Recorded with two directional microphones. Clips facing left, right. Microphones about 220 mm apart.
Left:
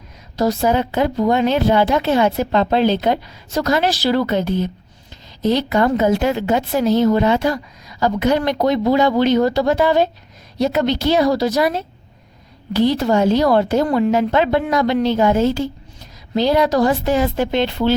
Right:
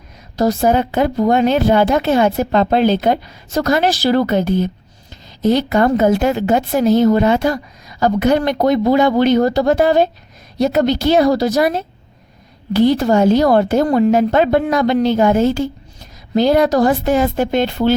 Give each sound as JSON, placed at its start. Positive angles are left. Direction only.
{"t": 0.3, "sound": "a woman's voice", "side_deg": -50}